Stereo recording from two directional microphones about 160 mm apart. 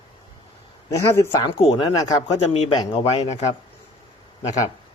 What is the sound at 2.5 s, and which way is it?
Speech, 40° left (ahead or behind).